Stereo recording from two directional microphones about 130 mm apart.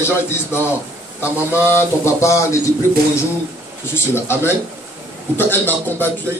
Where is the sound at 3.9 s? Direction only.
20° left (ahead or behind).